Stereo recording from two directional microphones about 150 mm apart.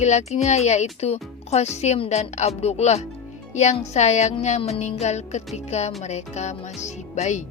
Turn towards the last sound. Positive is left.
turn(degrees=50)  # may be behind; listen again after turning